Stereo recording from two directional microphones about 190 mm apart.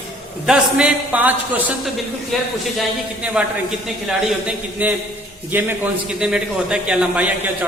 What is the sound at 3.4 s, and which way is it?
A man's voice, 5° right (ahead or behind).